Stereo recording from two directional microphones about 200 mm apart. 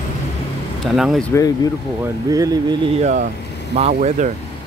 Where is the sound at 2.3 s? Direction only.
20° right (ahead or behind).